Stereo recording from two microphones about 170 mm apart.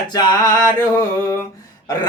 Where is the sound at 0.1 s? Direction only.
25° left (ahead or behind).